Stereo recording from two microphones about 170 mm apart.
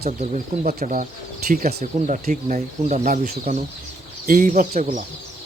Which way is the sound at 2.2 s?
45° right (ahead or behind).